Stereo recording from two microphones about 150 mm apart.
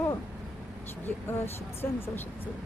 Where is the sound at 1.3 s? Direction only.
15° left (ahead or behind).